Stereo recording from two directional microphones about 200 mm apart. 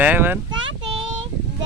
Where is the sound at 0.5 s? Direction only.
70° right (ahead or behind).